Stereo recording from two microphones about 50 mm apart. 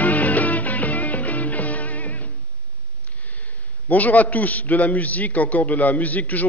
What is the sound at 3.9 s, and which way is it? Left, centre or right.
A man's voice, left.